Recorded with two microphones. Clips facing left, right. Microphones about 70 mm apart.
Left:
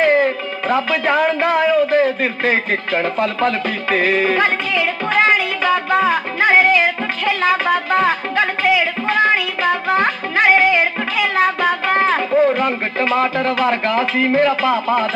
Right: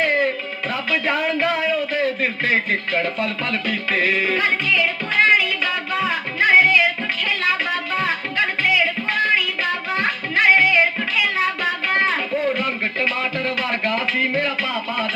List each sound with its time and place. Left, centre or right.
0.0 s music: left
0.7 s a man's voice: left
4.2 s music: left
11.2 s speech: left